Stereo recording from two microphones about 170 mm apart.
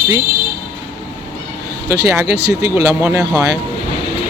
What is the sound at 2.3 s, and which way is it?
Speech, 75° right (ahead or behind).